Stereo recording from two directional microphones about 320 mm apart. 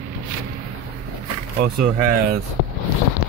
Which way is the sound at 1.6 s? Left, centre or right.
Right.